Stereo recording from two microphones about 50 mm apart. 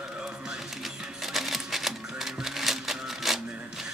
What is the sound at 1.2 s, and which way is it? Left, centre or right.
Music, centre.